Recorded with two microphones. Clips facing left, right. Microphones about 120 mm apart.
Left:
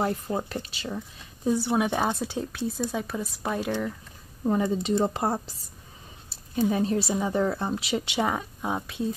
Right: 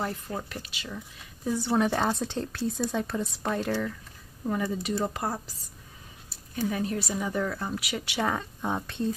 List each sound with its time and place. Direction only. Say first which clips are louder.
0.0 s speech: left 5 dB; 30° left (ahead or behind); by 3.9 s 15° left (ahead or behind)
4.5 s speech: left 5 dB; 25° left (ahead or behind); by 9.1 s 5° left (ahead or behind)